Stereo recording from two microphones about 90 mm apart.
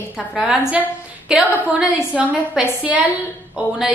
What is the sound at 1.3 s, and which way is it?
A woman's voice, 10° right (ahead or behind).